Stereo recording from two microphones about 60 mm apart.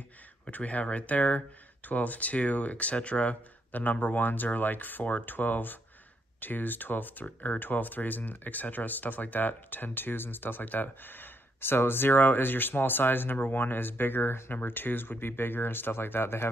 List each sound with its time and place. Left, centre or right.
0.5 s speech: left